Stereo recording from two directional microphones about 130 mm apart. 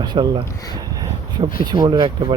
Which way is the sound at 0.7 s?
30° right (ahead or behind).